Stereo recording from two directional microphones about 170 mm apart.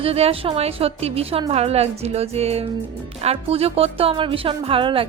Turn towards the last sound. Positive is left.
turn(degrees=-30)  # may be behind; listen again after turning